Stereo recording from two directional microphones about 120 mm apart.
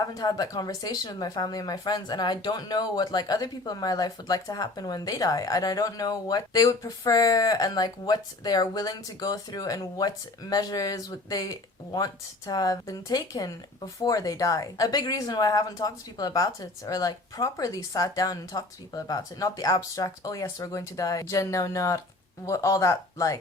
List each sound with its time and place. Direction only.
0.0 s speech: 35° left (ahead or behind)